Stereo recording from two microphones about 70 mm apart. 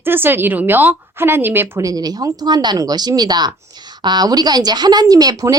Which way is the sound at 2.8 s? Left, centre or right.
Right.